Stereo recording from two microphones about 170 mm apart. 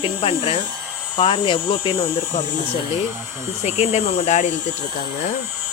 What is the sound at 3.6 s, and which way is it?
Speech, 40° left (ahead or behind).